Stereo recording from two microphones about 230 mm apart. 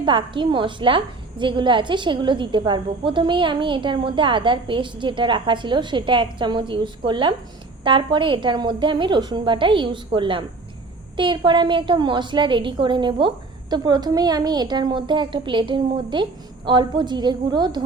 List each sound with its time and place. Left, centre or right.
0.0 s a woman's voice: right